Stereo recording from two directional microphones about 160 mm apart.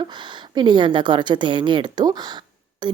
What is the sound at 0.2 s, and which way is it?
A woman's voice, 30° right (ahead or behind).